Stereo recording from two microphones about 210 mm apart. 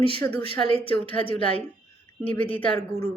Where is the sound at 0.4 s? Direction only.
25° left (ahead or behind).